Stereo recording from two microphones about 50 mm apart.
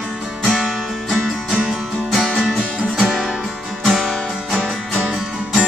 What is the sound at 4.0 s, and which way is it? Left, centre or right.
Music, centre.